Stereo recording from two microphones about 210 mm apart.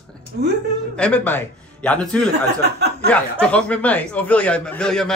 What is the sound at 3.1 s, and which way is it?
Speech, 5° left (ahead or behind).